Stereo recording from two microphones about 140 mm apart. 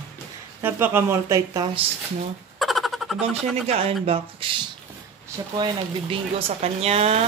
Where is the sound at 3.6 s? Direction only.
45° right (ahead or behind).